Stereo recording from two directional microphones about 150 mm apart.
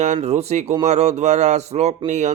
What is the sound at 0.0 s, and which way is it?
A man's voice, 50° right (ahead or behind).